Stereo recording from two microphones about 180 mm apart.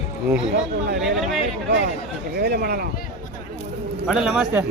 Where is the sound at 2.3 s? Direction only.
60° right (ahead or behind).